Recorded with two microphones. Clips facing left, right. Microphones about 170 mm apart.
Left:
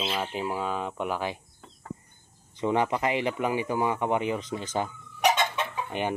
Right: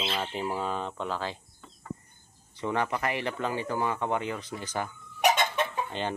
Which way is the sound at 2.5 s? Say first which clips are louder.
Left 4 dB; 15° left (ahead or behind).